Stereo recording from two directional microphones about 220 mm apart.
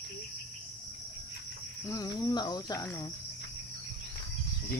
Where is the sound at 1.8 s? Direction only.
15° left (ahead or behind).